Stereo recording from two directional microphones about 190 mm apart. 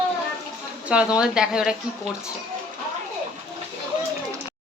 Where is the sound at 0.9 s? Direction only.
5° right (ahead or behind).